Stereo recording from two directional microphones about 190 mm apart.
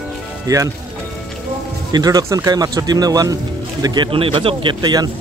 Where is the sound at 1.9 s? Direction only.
20° right (ahead or behind).